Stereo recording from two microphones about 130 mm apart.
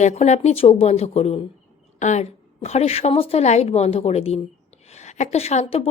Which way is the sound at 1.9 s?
65° left (ahead or behind).